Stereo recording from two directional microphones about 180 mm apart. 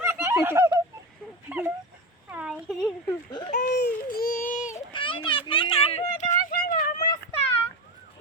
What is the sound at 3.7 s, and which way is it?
Baby cry, 60° left (ahead or behind).